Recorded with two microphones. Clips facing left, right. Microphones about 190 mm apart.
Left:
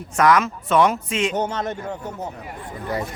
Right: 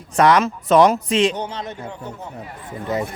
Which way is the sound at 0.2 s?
30° right (ahead or behind).